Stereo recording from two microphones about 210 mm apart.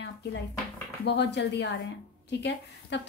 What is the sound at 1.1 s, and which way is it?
A woman's voice, 55° left (ahead or behind).